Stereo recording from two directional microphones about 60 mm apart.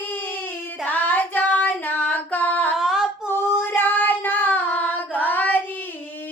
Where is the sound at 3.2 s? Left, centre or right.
Left.